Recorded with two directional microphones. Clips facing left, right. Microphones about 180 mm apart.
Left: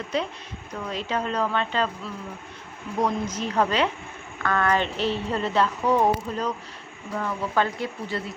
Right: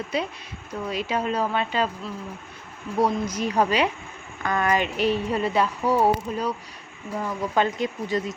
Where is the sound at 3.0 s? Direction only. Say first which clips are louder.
Right 2 dB; 10° right (ahead or behind).